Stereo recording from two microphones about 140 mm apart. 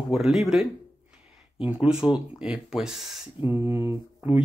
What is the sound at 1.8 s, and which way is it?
Speech, 5° right (ahead or behind).